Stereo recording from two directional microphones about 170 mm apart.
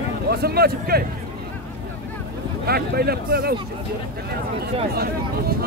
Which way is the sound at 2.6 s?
65° right (ahead or behind).